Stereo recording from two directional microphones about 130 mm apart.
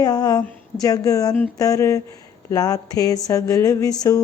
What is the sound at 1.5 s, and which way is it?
Speech, 25° left (ahead or behind).